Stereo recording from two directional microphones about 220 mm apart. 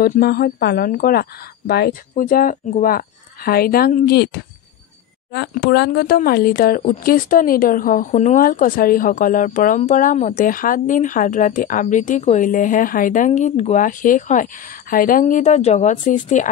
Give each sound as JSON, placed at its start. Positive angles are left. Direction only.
{"t": 0.0, "sound": "speech", "side_deg": 40}